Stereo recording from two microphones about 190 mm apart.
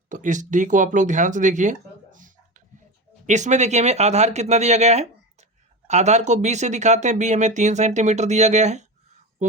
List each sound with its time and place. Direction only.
0.1 s speech: 40° right (ahead or behind)
2.1 s a sound: 45° right (ahead or behind)
3.2 s speech: 40° right (ahead or behind)